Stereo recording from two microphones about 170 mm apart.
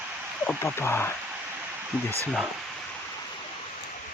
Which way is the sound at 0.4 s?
15° left (ahead or behind).